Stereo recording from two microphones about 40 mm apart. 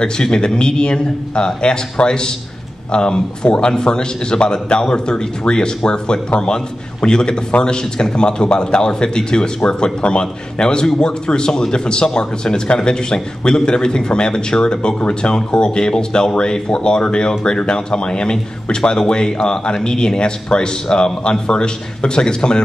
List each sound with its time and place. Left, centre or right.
0.0 s a man's voice: left